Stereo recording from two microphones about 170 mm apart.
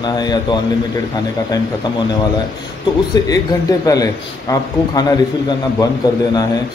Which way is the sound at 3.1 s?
20° left (ahead or behind).